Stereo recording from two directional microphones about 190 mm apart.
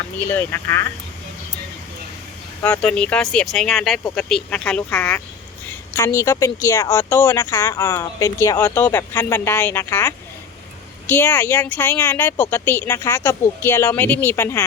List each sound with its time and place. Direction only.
0.3 s speech: 10° left (ahead or behind)
2.6 s speech: 5° left (ahead or behind)